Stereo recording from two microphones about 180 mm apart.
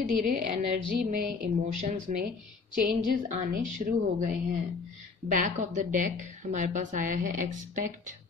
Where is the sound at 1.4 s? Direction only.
40° right (ahead or behind).